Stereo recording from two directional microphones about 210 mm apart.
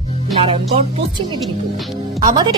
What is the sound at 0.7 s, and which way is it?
Speech, 30° right (ahead or behind).